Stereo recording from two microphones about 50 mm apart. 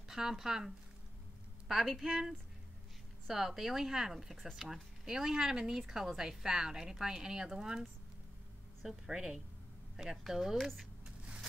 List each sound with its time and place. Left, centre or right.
0.1 s speech: centre
8.8 s speech: centre
11.1 s a sound: right